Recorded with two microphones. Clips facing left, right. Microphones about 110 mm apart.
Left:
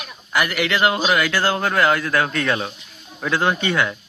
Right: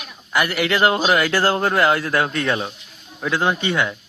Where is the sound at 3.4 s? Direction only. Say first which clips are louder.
Even; 20° right (ahead or behind).